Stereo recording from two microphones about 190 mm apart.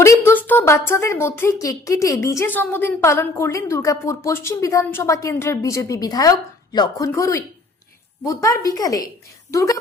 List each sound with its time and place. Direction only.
0.0 s a woman's voice: 15° left (ahead or behind)